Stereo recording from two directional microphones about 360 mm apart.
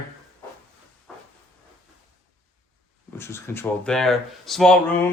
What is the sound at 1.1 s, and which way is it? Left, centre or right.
Hiss, centre.